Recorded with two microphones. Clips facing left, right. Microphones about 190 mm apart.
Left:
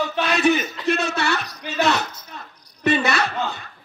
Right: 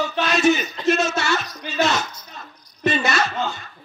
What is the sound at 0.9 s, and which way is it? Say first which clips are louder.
A man's voice: right 2 dB; 60° left (ahead or behind).